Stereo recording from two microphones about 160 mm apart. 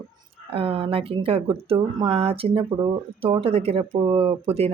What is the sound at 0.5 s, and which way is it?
A woman's voice, 35° right (ahead or behind).